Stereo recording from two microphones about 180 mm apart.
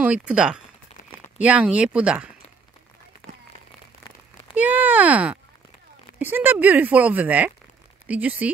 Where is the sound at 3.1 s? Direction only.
55° left (ahead or behind).